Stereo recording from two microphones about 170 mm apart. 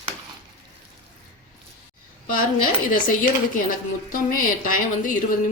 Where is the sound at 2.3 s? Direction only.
55° left (ahead or behind).